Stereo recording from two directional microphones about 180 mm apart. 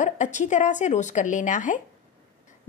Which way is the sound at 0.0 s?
40° left (ahead or behind).